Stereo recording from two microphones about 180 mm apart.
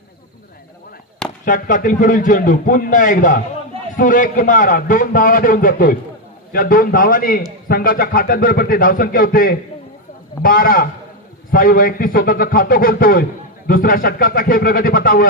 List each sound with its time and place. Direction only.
1.5 s a man's voice: 50° left (ahead or behind)